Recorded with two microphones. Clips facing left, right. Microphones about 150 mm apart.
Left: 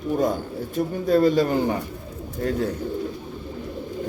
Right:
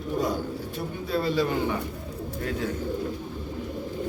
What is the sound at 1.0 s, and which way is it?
Speech, 45° left (ahead or behind).